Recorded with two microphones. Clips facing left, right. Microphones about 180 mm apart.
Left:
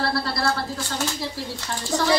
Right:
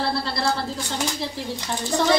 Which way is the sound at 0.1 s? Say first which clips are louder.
Even; 25° right (ahead or behind).